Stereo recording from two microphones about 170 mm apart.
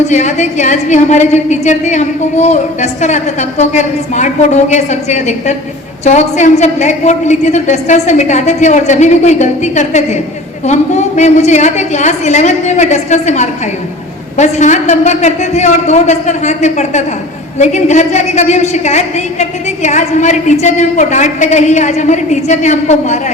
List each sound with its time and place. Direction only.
0.1 s a woman's voice: 45° left (ahead or behind)